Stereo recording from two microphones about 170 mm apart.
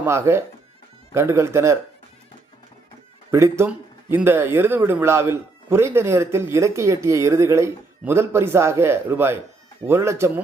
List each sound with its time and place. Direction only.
0.0 s speech: 15° right (ahead or behind)
3.3 s speech: 15° right (ahead or behind)